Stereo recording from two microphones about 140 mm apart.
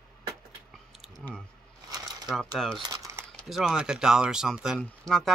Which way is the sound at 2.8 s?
30° right (ahead or behind).